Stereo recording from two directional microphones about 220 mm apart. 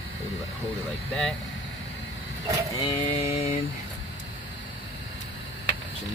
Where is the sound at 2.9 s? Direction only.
25° left (ahead or behind).